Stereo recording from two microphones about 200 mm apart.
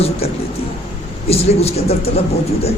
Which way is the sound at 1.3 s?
30° left (ahead or behind).